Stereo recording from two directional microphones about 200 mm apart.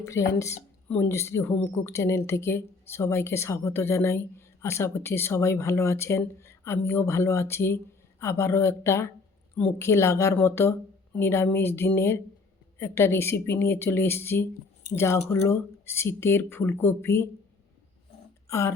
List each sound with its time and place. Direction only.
0.0 s speech: 15° left (ahead or behind)
18.4 s speech: 15° left (ahead or behind)